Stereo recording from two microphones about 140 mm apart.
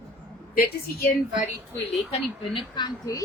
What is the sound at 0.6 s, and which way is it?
Speech, 90° left.